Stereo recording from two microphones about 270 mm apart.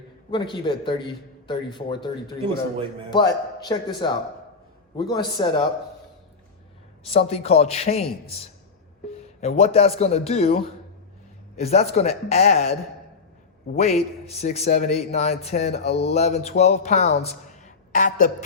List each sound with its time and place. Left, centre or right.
0.3 s a man's voice: centre
7.0 s a man's voice: left
9.1 s a man's voice: left
13.7 s a man's voice: left